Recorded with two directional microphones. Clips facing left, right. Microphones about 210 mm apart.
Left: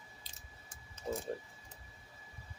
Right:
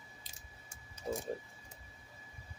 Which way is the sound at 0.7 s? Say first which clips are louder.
Even; 10° right (ahead or behind).